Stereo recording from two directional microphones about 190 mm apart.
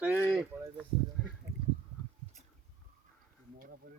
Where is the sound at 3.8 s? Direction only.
45° right (ahead or behind).